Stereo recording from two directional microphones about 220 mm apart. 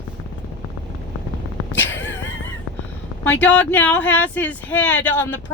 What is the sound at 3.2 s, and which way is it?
Speech, 5° left (ahead or behind).